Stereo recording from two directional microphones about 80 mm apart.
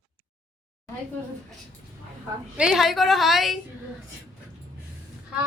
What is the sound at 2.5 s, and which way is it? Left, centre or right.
A woman's voice, centre.